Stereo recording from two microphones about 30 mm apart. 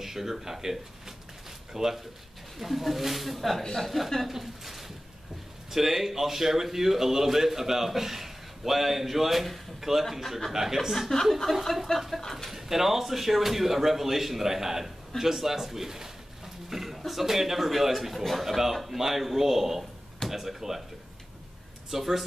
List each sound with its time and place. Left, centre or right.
0.0 s speech: centre
4.3 s a man's voice: centre
11.0 s speech: centre
11.9 s speech: left
12.4 s a man's voice: centre
18.1 s a man's voice: centre
21.9 s speech: centre